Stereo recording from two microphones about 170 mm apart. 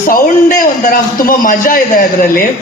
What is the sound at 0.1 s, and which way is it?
A man's voice, 55° left (ahead or behind).